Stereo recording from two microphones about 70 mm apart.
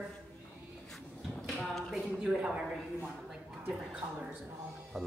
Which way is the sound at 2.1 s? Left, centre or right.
Centre.